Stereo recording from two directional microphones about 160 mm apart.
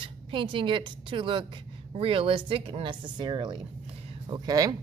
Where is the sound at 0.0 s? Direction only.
30° right (ahead or behind).